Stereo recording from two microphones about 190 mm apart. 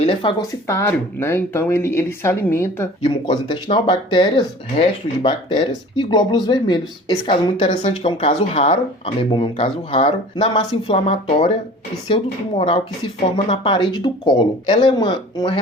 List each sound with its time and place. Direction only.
0.0 s speech: 30° left (ahead or behind); by 2.9 s 10° left (ahead or behind)
3.0 s speech: 30° left (ahead or behind)